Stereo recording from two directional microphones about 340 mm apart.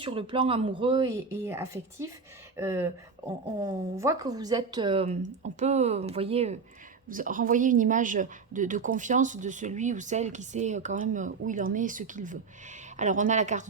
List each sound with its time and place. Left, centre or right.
0.0 s a woman's voice: centre